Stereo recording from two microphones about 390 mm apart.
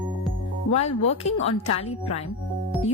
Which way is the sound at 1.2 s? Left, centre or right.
Centre.